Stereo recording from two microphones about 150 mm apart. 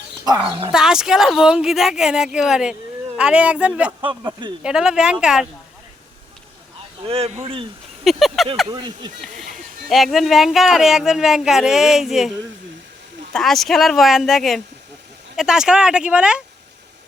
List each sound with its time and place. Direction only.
0.4 s speech: 35° right (ahead or behind)
0.7 s speech: 5° right (ahead or behind)
4.0 s speech: 30° right (ahead or behind)
4.6 s speech: 5° right (ahead or behind)
7.1 s speech: 40° right (ahead or behind)
8.0 s a sound: centre (ahead or behind)
8.7 s speech: 30° right (ahead or behind)
9.9 s speech: centre (ahead or behind)
13.3 s speech: centre (ahead or behind)